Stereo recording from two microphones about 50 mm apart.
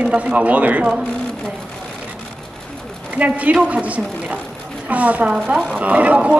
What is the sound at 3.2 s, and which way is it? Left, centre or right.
Speech, right.